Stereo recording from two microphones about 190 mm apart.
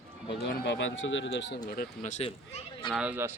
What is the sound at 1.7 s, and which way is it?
Speech, 45° left (ahead or behind).